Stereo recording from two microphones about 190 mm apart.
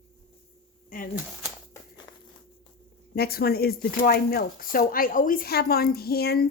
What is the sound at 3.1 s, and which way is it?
Speech, 55° left (ahead or behind).